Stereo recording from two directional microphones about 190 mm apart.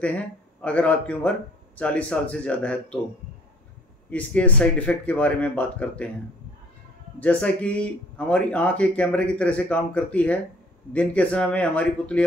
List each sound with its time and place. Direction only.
0.6 s speech: 5° left (ahead or behind)
4.1 s speech: 5° left (ahead or behind)
7.2 s speech: 5° left (ahead or behind)